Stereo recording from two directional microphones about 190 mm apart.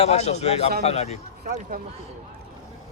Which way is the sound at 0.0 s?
35° left (ahead or behind).